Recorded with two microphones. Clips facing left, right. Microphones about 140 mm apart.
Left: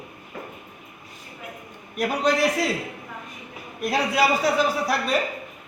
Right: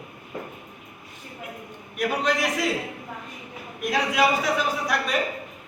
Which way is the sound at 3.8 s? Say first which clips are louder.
Left 1 dB; 35° left (ahead or behind).